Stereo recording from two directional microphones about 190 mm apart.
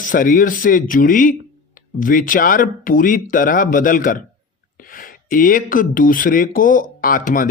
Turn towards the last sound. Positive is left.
turn(degrees=45)  # may be behind; listen again after turning